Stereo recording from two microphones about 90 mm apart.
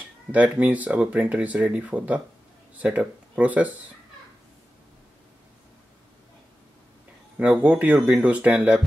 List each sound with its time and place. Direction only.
0.3 s speech: 15° right (ahead or behind)
7.3 s speech: 15° right (ahead or behind)